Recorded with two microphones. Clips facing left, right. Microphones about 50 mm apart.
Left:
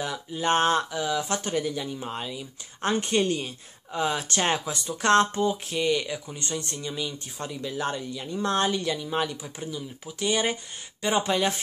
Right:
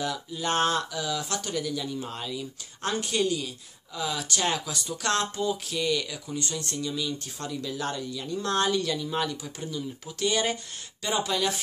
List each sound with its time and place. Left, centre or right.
0.0 s speech: left